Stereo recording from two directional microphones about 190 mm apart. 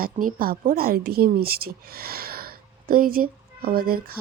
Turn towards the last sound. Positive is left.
turn(degrees=-50)  # may be behind; listen again after turning